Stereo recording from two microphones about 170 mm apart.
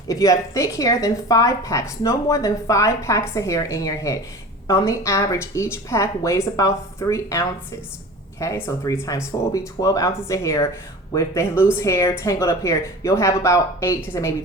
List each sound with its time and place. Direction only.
0.1 s a woman's voice: 20° left (ahead or behind)